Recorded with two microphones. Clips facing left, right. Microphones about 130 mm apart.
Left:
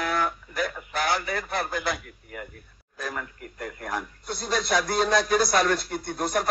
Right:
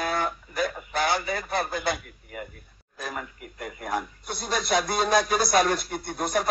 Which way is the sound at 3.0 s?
10° right (ahead or behind).